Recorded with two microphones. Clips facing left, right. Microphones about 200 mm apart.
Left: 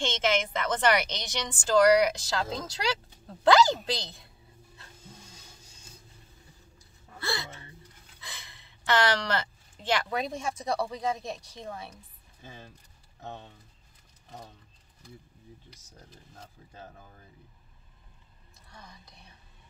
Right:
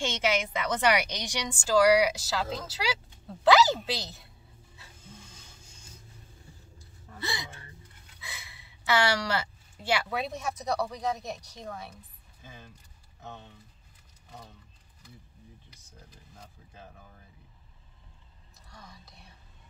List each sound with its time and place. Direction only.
0.0 s a woman's voice: 10° right (ahead or behind)
7.2 s gasp: 15° right (ahead or behind)
8.2 s a sound: 10° right (ahead or behind)
10.6 s speech: centre (ahead or behind)
18.8 s whispering: centre (ahead or behind)